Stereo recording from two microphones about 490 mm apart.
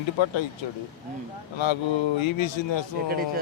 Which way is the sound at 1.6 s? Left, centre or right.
Left.